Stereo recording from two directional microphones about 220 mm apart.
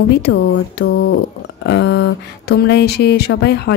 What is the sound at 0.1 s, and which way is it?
Speech, 45° left (ahead or behind).